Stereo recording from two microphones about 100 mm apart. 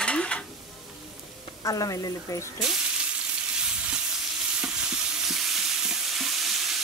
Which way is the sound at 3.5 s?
10° right (ahead or behind).